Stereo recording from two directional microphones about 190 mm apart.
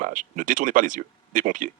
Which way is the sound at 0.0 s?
45° right (ahead or behind).